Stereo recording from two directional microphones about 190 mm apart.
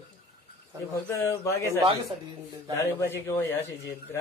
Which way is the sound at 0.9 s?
15° left (ahead or behind).